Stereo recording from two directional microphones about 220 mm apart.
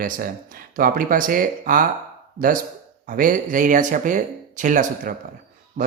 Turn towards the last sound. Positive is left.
turn(degrees=-35)  # may be behind; listen again after turning